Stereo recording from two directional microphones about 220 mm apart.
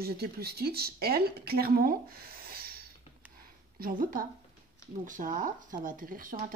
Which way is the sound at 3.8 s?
40° right (ahead or behind).